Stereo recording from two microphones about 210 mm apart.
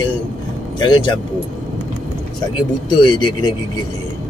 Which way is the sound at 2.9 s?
20° left (ahead or behind).